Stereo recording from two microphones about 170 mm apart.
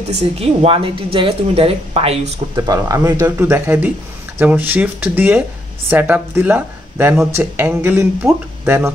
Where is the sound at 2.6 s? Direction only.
20° right (ahead or behind).